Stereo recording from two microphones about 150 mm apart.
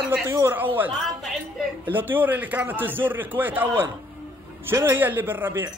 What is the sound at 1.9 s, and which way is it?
A man's voice, 15° right (ahead or behind).